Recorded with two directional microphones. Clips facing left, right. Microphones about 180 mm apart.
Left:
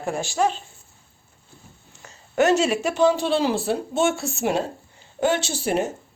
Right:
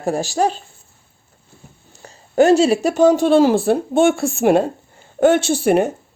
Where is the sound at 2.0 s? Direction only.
35° right (ahead or behind); by 5.9 s 55° right (ahead or behind).